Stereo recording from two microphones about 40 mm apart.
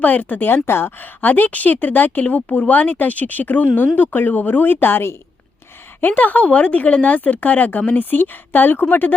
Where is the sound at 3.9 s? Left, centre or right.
Left.